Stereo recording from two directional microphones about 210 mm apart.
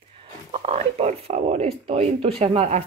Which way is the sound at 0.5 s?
30° right (ahead or behind).